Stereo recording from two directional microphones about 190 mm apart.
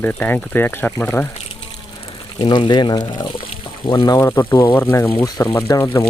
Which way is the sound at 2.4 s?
25° left (ahead or behind).